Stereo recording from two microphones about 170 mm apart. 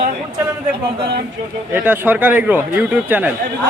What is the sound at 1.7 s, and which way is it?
A man's voice, 10° right (ahead or behind).